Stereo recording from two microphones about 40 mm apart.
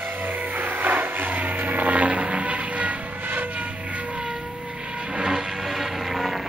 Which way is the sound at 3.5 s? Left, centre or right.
Right.